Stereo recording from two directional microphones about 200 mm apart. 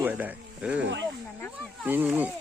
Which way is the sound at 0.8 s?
65° right (ahead or behind).